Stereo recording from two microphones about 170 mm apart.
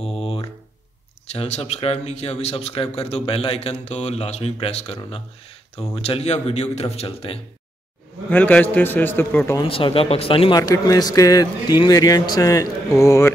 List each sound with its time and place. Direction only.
0.0 s a sound: 35° left (ahead or behind)
1.3 s a man's voice: 40° left (ahead or behind)
8.3 s a man's voice: 10° left (ahead or behind)
9.7 s a man's voice: 35° left (ahead or behind)
10.6 s speech: 20° left (ahead or behind)